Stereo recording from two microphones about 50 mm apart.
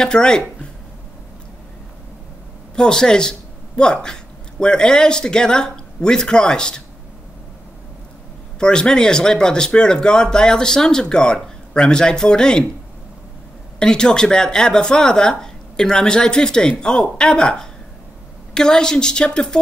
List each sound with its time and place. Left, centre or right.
0.0 s speech: centre
2.7 s speech: centre
8.5 s speech: centre
13.7 s speech: centre